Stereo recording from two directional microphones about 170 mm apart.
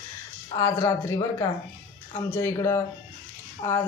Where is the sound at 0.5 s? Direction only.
20° left (ahead or behind).